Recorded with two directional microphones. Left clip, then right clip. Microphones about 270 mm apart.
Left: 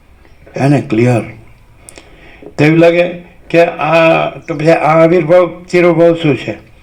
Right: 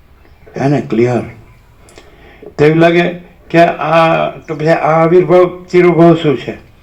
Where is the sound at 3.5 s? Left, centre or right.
Left.